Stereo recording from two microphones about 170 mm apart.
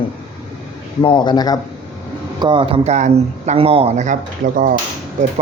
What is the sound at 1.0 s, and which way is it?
Speech, 25° left (ahead or behind).